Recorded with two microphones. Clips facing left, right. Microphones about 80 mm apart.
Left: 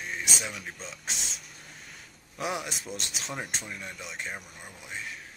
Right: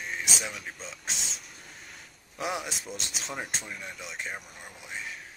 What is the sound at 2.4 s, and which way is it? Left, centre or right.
Speech, centre.